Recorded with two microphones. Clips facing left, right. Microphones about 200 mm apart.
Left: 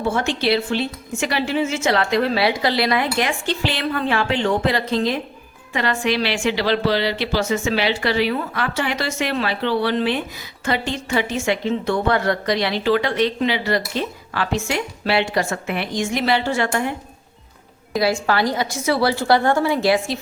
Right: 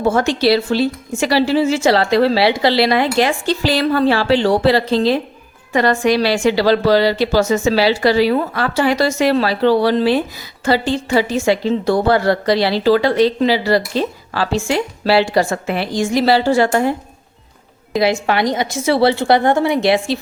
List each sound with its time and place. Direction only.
0.0 s a woman's voice: 40° right (ahead or behind)
5.7 s a woman's voice: 45° right (ahead or behind)
17.9 s a woman's voice: 20° right (ahead or behind)